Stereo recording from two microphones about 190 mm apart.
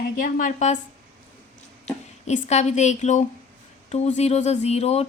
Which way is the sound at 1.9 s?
35° left (ahead or behind).